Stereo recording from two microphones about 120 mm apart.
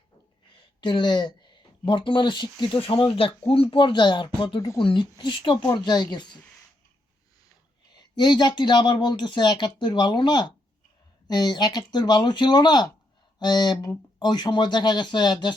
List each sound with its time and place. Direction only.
0.8 s speech: 40° left (ahead or behind)
7.9 s speech: 35° left (ahead or behind)